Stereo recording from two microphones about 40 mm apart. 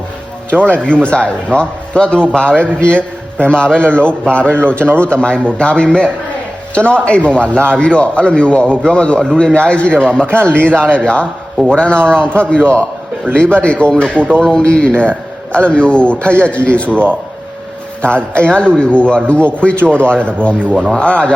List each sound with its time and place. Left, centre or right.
0.5 s a man's voice: left
13.3 s a man's voice: left
18.3 s a man's voice: left